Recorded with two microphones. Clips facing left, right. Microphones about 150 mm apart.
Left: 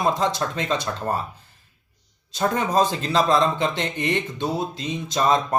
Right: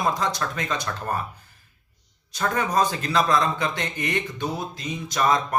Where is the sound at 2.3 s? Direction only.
25° left (ahead or behind).